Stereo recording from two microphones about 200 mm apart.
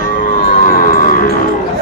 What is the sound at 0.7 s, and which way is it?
Music, 45° left (ahead or behind).